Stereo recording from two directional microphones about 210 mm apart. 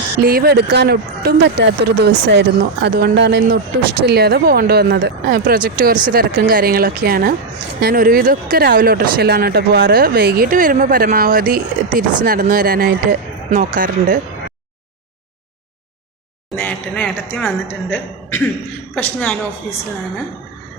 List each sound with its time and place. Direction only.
0.2 s speech: 45° right (ahead or behind)
16.6 s a woman's voice: 5° left (ahead or behind)